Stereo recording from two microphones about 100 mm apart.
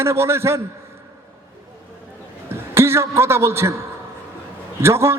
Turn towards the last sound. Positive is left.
turn(degrees=-25)  # may be behind; listen again after turning